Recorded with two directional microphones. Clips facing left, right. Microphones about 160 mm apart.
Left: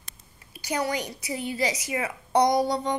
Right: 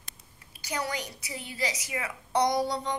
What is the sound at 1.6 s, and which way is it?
A woman's voice, 35° left (ahead or behind).